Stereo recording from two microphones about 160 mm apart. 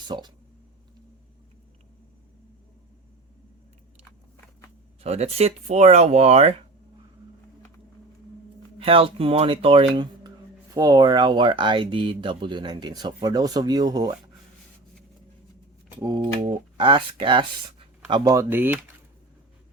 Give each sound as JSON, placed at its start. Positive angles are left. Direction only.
{"t": 0.1, "sound": "speech", "side_deg": -30}
{"t": 5.0, "sound": "speech", "side_deg": -40}
{"t": 8.8, "sound": "speech", "side_deg": -35}
{"t": 16.0, "sound": "speech", "side_deg": -25}